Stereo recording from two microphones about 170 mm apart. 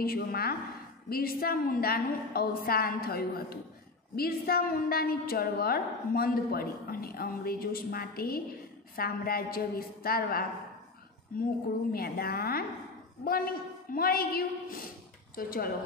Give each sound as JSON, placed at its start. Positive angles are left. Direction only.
{"t": 0.0, "sound": "a woman's voice", "side_deg": 60}
{"t": 11.9, "sound": "a woman's voice", "side_deg": 60}